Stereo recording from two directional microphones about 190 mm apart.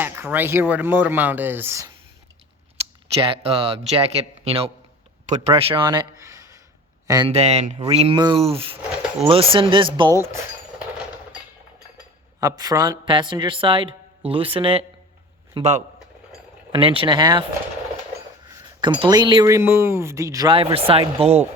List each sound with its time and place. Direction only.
0.0 s speech: 10° right (ahead or behind)
3.2 s speech: 30° right (ahead or behind)
7.3 s speech: 35° right (ahead or behind)
12.4 s speech: 20° right (ahead or behind)
18.5 s speech: 25° right (ahead or behind)